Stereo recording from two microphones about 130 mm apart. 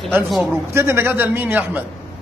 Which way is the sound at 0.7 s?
20° right (ahead or behind).